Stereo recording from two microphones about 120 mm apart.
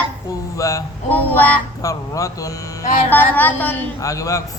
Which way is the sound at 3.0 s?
15° left (ahead or behind).